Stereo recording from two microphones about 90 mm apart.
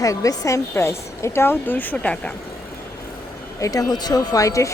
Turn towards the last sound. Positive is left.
turn(degrees=35)  # may be behind; listen again after turning